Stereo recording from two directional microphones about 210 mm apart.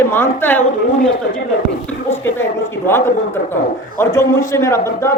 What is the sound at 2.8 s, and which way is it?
A man's voice, 10° left (ahead or behind).